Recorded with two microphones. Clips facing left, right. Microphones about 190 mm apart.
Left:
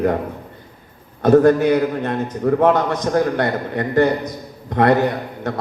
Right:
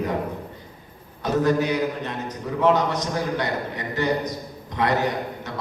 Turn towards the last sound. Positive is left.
turn(degrees=55)  # may be behind; listen again after turning